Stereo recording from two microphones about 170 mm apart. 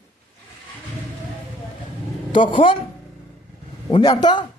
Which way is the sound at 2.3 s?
30° left (ahead or behind).